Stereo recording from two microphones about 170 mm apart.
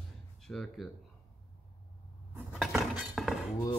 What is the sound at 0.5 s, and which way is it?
Speech, 5° left (ahead or behind).